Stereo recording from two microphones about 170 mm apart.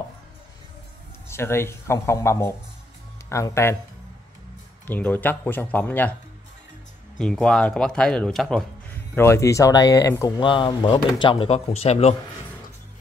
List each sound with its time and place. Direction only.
1.2 s speech: 15° left (ahead or behind)
4.8 s speech: 10° left (ahead or behind)
7.2 s speech: 5° left (ahead or behind); by 12.2 s 40° left (ahead or behind)